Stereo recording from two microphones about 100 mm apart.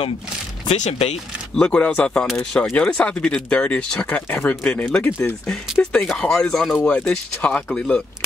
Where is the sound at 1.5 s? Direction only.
10° left (ahead or behind).